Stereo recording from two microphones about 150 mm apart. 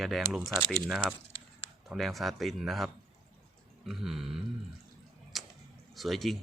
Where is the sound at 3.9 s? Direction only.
Centre (ahead or behind).